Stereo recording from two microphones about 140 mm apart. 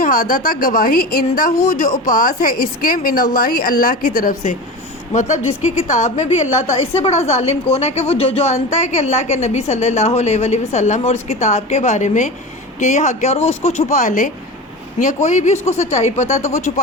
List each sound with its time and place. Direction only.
0.0 s a woman's voice: 75° left (ahead or behind)
5.1 s a woman's voice: 60° left (ahead or behind)